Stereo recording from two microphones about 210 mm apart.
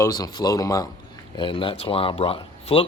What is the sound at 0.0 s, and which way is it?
Speech, 20° left (ahead or behind).